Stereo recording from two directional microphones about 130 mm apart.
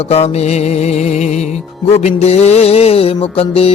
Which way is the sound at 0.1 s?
55° left (ahead or behind).